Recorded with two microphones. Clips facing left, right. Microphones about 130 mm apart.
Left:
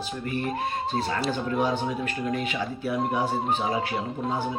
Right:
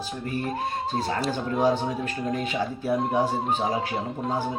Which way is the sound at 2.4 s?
35° right (ahead or behind).